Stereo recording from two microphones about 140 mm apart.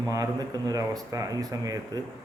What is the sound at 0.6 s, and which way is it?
Speech, 25° right (ahead or behind).